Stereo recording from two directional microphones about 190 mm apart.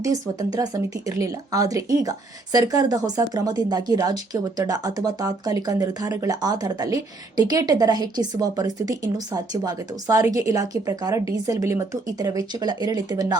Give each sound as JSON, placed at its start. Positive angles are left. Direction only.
{"t": 0.0, "sound": "speech", "side_deg": -20}